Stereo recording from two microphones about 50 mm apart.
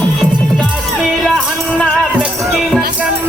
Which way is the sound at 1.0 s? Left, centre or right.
Centre.